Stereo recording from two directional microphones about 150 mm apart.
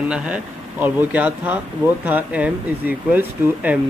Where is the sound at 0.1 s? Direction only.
10° right (ahead or behind).